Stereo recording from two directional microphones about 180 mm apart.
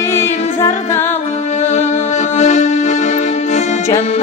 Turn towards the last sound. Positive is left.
turn(degrees=40)  # may be behind; listen again after turning